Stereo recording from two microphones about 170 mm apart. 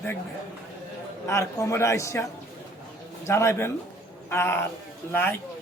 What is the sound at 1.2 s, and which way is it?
A man's voice, 15° left (ahead or behind).